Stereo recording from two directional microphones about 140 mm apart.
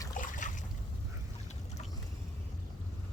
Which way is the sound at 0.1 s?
70° left (ahead or behind).